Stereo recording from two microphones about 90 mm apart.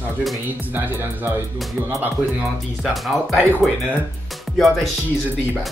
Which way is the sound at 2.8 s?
Centre (ahead or behind).